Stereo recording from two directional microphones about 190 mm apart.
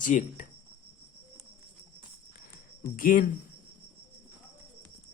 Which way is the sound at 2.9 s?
50° left (ahead or behind).